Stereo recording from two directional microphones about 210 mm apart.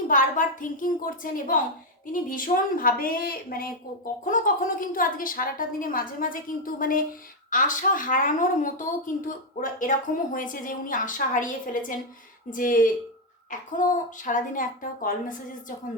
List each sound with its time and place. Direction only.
0.1 s a woman's voice: 40° left (ahead or behind)